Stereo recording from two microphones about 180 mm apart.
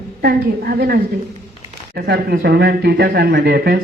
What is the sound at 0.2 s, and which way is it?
Speech, 60° right (ahead or behind).